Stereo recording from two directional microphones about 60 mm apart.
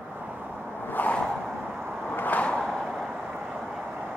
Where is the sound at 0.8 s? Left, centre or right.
Left.